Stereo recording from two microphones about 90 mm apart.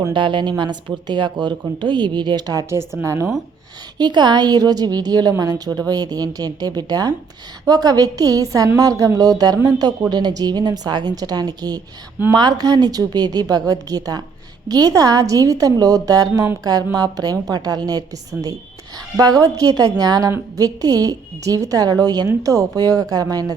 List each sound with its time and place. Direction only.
0.1 s speech: 60° right (ahead or behind)
3.0 s a woman's voice: 35° right (ahead or behind)
3.9 s a woman's voice: 50° right (ahead or behind)